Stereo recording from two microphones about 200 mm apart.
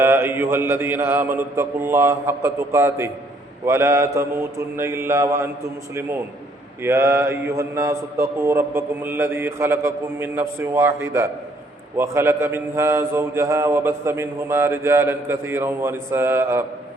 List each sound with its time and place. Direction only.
0.0 s a man's voice: 10° right (ahead or behind)
6.8 s a man's voice: 15° right (ahead or behind)